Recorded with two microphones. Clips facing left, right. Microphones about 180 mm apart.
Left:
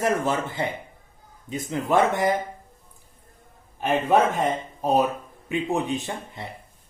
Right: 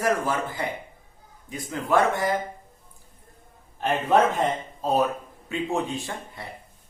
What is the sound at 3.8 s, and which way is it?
A man's voice, 10° left (ahead or behind).